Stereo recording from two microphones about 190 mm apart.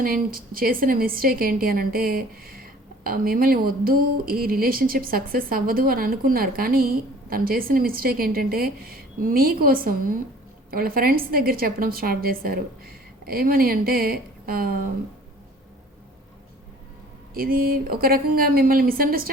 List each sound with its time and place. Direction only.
0.0 s a woman's voice: 50° right (ahead or behind)
17.3 s a woman's voice: 50° right (ahead or behind)